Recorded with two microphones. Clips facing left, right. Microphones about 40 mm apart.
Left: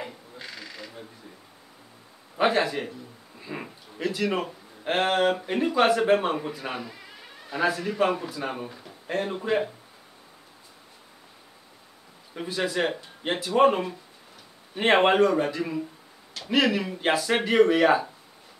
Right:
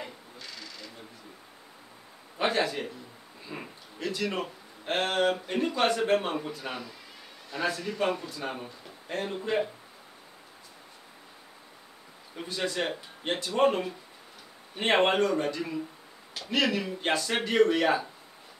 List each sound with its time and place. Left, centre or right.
0.4 s a sound: centre
2.3 s a man's voice: centre
12.4 s speech: centre